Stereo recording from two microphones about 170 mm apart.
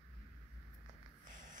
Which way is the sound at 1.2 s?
50° right (ahead or behind).